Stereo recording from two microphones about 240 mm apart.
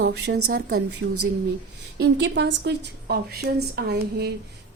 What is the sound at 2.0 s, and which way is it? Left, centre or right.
A woman's voice, right.